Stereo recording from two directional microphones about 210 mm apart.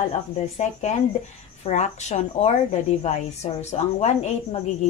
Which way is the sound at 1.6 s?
35° left (ahead or behind).